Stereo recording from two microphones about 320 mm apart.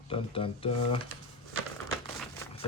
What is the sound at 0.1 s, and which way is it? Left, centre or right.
Speech, centre.